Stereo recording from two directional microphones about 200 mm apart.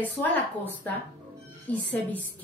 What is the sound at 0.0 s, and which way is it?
Speech, 10° left (ahead or behind).